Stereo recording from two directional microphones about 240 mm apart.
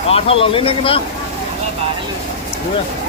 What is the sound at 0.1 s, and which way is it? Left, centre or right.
Speech, left.